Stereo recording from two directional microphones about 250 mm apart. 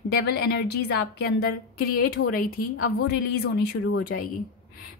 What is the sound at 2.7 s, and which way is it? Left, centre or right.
Speech, left.